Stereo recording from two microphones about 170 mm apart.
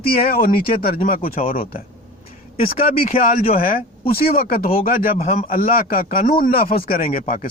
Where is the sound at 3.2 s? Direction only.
55° left (ahead or behind).